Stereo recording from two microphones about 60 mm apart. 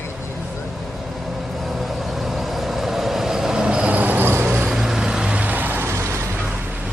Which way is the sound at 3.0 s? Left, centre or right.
Centre.